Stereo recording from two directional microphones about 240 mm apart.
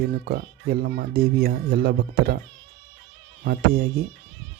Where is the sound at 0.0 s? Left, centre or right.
Right.